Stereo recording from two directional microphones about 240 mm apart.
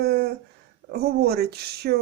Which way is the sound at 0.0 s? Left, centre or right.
Right.